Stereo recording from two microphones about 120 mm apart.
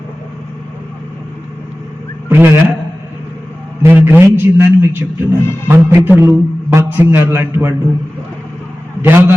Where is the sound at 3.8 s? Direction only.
20° right (ahead or behind).